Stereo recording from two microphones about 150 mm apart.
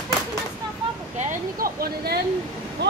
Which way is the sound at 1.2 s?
65° right (ahead or behind).